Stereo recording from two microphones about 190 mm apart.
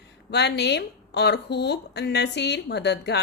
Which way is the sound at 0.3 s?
60° left (ahead or behind).